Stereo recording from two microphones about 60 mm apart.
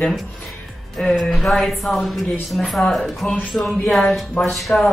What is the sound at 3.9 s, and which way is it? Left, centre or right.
Speech, centre.